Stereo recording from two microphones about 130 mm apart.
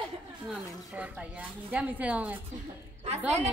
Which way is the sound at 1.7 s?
10° right (ahead or behind).